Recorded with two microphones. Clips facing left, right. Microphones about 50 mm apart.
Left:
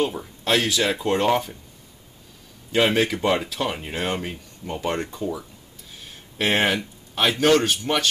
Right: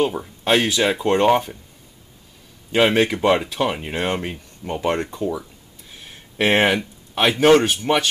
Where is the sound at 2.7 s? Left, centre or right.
Centre.